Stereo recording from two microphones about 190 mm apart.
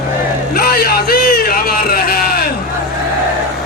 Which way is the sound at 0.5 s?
50° left (ahead or behind).